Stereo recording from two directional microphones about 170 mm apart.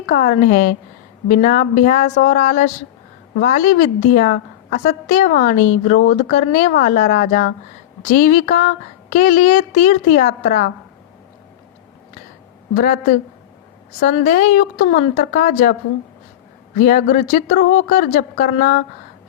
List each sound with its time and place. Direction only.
0.0 s a woman's voice: 55° left (ahead or behind)
12.7 s a woman's voice: 55° left (ahead or behind)
14.0 s a woman's voice: 55° left (ahead or behind)
16.8 s speech: 55° left (ahead or behind)